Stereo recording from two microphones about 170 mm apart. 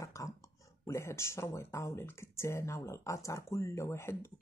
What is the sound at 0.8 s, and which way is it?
Speech, 15° left (ahead or behind).